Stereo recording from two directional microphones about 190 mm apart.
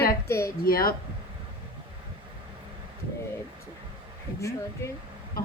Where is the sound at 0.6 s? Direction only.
50° left (ahead or behind).